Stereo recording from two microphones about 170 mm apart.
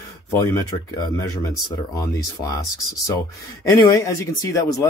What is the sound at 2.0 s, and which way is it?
Speech, 20° left (ahead or behind).